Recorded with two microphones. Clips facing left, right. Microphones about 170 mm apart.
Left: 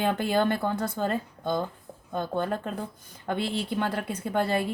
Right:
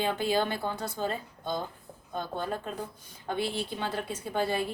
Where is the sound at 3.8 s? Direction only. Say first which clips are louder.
Left 4 dB; 60° left (ahead or behind).